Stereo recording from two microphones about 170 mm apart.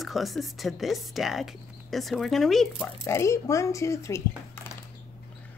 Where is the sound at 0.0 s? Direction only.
Centre (ahead or behind).